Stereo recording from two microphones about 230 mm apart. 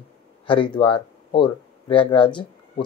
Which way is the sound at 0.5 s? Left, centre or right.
Left.